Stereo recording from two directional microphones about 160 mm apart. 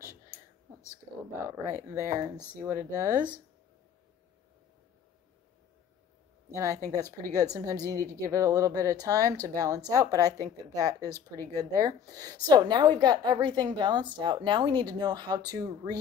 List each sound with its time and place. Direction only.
1.5 s speech: 15° right (ahead or behind)
6.5 s a woman's voice: 20° right (ahead or behind)